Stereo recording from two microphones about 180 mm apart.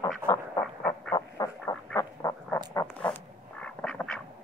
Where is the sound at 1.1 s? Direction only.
20° left (ahead or behind).